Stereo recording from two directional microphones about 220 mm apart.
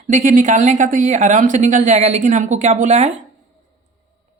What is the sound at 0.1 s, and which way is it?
Speech, 35° right (ahead or behind).